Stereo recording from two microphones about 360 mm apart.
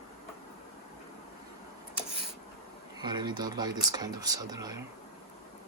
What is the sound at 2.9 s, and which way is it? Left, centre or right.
Speech, centre.